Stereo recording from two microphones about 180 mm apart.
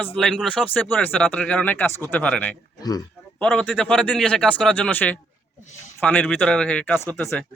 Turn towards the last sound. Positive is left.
turn(degrees=10)  # may be behind; listen again after turning